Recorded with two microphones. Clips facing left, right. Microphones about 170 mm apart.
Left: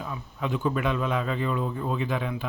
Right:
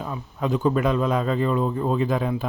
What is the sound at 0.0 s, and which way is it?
Speech, 40° right (ahead or behind).